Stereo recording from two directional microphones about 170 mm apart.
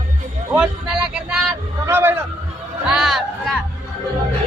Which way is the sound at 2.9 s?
Centre (ahead or behind).